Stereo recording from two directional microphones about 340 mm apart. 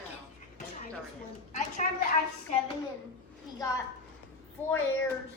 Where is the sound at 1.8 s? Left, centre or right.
Left.